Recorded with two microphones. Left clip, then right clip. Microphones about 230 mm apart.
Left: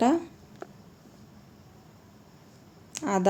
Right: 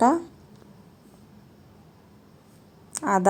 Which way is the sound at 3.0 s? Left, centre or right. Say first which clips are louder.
Right 5 dB; centre.